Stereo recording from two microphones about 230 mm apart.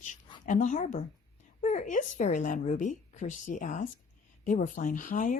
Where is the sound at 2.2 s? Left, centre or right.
Left.